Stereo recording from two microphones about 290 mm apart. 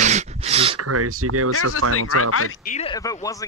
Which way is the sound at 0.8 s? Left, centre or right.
Right.